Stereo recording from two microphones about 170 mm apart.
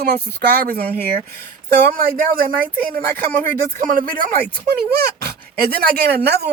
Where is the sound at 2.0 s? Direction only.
55° right (ahead or behind).